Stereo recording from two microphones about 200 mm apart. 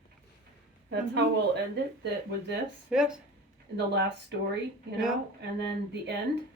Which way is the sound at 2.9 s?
5° right (ahead or behind).